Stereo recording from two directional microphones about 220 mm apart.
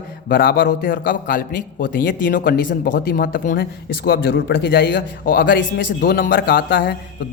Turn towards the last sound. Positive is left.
turn(degrees=45)  # may be behind; listen again after turning